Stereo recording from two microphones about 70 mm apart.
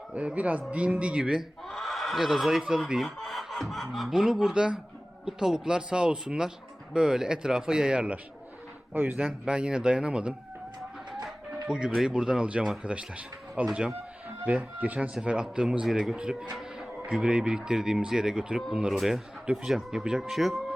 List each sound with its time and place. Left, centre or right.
0.1 s speech: centre
1.6 s a man's voice: centre; by 9.1 s right
9.1 s speech: centre
10.8 s a sound: centre
11.7 s speech: centre